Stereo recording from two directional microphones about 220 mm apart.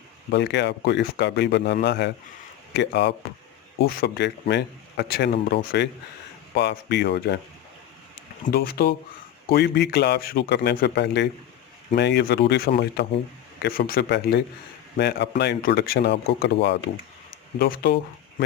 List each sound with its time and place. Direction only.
0.3 s speech: 50° left (ahead or behind)
8.4 s speech: 45° left (ahead or behind)